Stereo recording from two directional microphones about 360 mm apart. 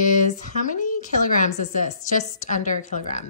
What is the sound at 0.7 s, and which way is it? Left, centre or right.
A woman's voice, left.